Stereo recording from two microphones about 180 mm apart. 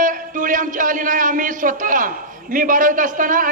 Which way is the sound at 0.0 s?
50° right (ahead or behind).